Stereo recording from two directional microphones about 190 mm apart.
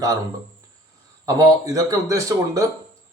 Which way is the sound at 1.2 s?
15° right (ahead or behind).